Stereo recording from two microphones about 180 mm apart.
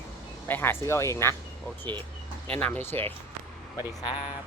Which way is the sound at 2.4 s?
10° left (ahead or behind).